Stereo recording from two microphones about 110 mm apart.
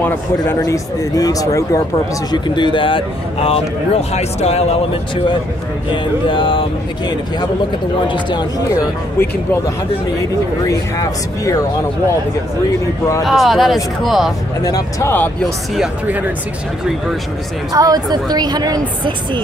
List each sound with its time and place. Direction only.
0.6 s speech: 35° left (ahead or behind)
2.3 s speech: 45° left (ahead or behind); by 4.7 s 70° left (ahead or behind)
6.2 s speech: 50° left (ahead or behind)
8.1 s speech: 40° left (ahead or behind)
10.7 s speech: 30° left (ahead or behind)
13.2 s speech: centre (ahead or behind)
14.6 s speech: 35° left (ahead or behind)
15.0 s speech: 15° left (ahead or behind)
17.7 s a woman's voice: 35° right (ahead or behind)